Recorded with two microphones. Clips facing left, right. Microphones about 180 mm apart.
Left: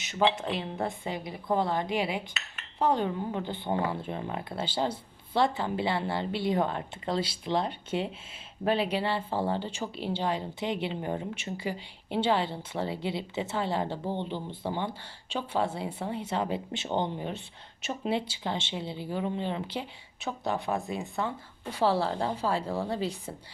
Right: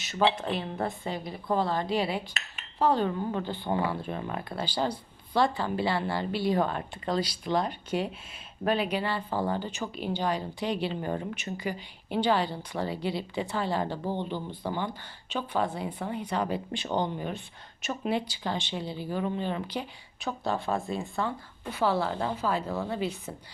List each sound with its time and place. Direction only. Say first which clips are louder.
0.0 s speech: even; 20° left (ahead or behind)
21.7 s speech: left 1 dB; 35° left (ahead or behind)